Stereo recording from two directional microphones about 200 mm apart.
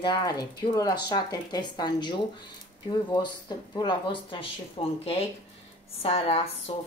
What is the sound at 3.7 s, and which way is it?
A woman's voice, 25° left (ahead or behind).